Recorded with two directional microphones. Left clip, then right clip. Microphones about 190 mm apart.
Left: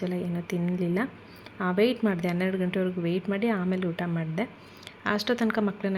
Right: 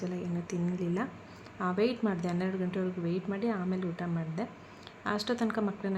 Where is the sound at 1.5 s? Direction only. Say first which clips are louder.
Left 5 dB; 15° left (ahead or behind).